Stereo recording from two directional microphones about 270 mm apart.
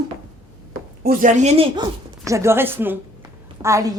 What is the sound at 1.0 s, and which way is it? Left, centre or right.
A woman's voice, right.